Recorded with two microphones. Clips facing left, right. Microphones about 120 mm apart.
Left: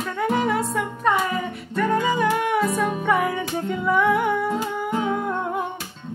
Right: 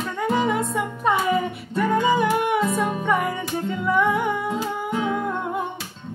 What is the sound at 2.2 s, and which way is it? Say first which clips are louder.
Music: even; 5° right (ahead or behind).